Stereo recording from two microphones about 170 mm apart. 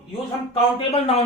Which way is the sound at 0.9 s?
40° left (ahead or behind).